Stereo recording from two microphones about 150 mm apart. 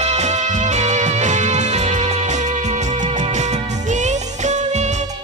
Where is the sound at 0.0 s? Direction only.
50° right (ahead or behind).